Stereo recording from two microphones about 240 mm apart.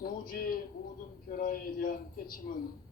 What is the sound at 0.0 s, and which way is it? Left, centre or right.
A man's voice, left.